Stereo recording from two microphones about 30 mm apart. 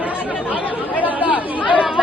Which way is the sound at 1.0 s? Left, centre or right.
Right.